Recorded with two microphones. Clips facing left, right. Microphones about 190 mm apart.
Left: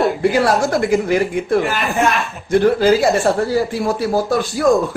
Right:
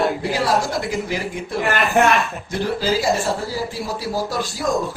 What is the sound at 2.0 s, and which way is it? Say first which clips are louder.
Speech: right 1 dB; 70° right (ahead or behind).